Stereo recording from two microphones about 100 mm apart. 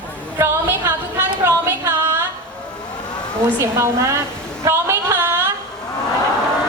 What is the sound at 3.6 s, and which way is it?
A woman's voice, 30° right (ahead or behind).